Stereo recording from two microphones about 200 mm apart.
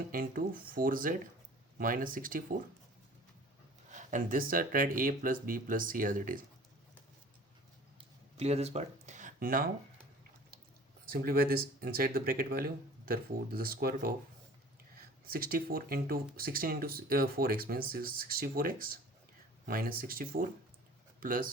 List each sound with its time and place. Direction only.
0.1 s speech: 45° right (ahead or behind)
3.9 s speech: 40° right (ahead or behind)
8.4 s speech: 30° right (ahead or behind)
11.0 s speech: 45° right (ahead or behind)